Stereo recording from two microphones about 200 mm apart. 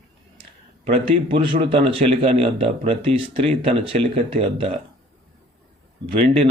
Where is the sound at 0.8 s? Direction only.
25° right (ahead or behind).